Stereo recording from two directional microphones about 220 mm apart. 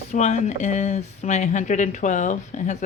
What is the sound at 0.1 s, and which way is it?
Speech, 30° left (ahead or behind).